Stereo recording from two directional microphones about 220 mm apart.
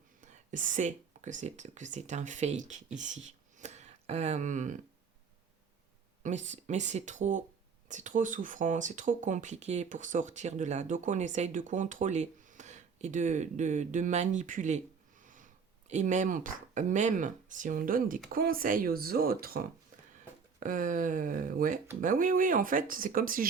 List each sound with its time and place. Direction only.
0.2 s speech: 35° right (ahead or behind)
6.2 s speech: 35° right (ahead or behind)
15.2 s a sound: 35° right (ahead or behind)
15.9 s speech: 35° right (ahead or behind)
20.6 s speech: 35° right (ahead or behind)